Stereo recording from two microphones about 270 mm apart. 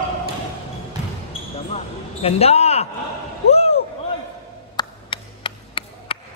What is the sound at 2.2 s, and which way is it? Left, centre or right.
Speech, left.